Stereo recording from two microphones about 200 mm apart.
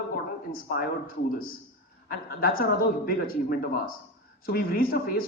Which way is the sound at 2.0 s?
45° left (ahead or behind).